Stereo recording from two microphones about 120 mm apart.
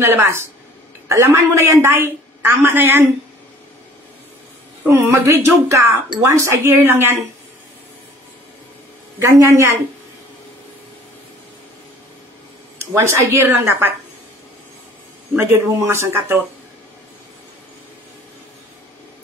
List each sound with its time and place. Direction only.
0.0 s a woman's voice: 20° right (ahead or behind)
4.8 s a woman's voice: 25° right (ahead or behind)
9.2 s a woman's voice: 25° right (ahead or behind)
12.7 s a woman's voice: 25° right (ahead or behind)
15.3 s a woman's voice: 20° right (ahead or behind)